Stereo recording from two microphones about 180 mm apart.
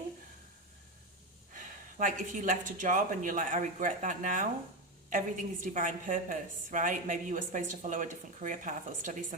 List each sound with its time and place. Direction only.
1.5 s a woman's voice: 45° right (ahead or behind)